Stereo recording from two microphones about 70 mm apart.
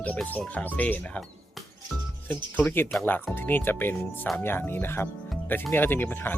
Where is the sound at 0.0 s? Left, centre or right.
Left.